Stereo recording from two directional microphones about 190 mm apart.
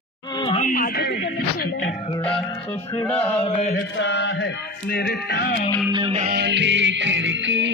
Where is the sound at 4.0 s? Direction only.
70° left (ahead or behind).